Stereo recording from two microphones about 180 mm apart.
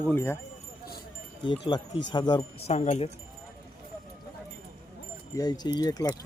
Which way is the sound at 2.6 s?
40° left (ahead or behind).